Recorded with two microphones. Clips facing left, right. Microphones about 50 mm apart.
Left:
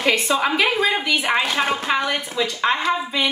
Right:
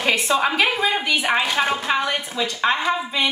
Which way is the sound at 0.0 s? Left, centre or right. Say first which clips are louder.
Even; centre.